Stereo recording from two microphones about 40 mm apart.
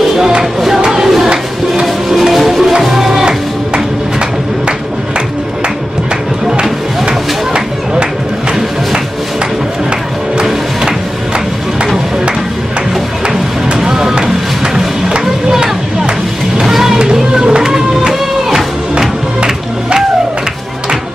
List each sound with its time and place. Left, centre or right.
0.7 s a sound: centre
2.0 s music: centre
7.1 s a sound: right
10.4 s music: centre
13.7 s music: centre
16.5 s music: centre